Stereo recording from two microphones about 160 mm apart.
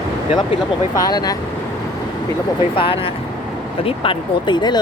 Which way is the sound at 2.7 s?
35° left (ahead or behind).